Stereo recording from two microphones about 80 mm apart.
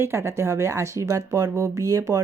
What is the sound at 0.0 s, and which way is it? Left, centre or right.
Speech, right.